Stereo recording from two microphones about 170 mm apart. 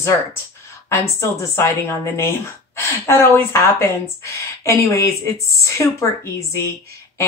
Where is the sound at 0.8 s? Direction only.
15° left (ahead or behind).